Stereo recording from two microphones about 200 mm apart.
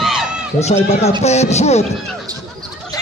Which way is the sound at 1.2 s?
35° left (ahead or behind).